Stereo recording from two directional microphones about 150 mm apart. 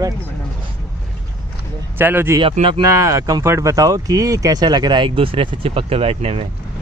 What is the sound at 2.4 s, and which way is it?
Speech, 35° right (ahead or behind).